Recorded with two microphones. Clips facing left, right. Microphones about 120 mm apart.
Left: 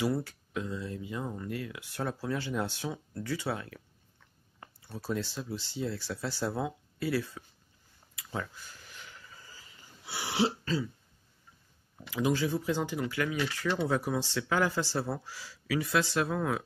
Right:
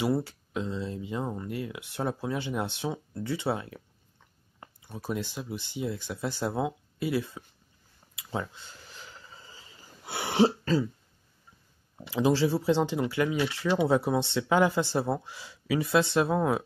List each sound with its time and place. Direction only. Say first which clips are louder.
0.0 s speech: right 3 dB; 25° right (ahead or behind)
8.2 s a sound: right 4 dB; 20° right (ahead or behind)
10.0 s throat clearing: right 6 dB; 55° right (ahead or behind)
12.0 s speech: right 5 dB; 30° right (ahead or behind)